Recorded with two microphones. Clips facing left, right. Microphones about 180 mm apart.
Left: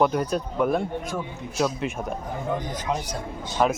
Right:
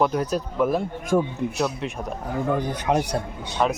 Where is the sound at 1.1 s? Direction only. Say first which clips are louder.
Right 16 dB; 45° right (ahead or behind).